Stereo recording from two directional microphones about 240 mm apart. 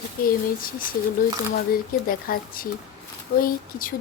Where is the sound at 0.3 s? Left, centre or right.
Left.